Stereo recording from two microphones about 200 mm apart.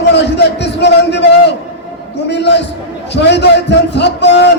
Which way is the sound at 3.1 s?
60° left (ahead or behind).